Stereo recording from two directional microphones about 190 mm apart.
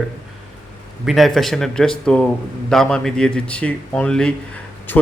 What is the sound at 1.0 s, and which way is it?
Speech, centre (ahead or behind).